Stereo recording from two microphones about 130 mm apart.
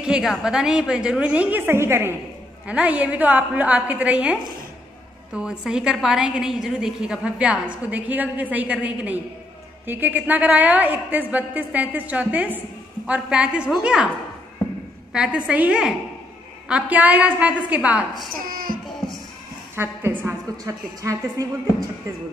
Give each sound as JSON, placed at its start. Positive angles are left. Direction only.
{"t": 0.0, "sound": "a woman's voice", "side_deg": -5}
{"t": 15.1, "sound": "a woman's voice", "side_deg": -10}
{"t": 18.4, "sound": "music", "side_deg": -90}
{"t": 19.7, "sound": "a woman's voice", "side_deg": -15}